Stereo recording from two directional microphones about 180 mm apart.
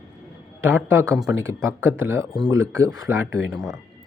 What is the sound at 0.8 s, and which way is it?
Speech, 15° right (ahead or behind).